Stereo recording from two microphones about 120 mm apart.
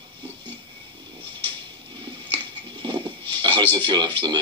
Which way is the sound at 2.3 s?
45° right (ahead or behind).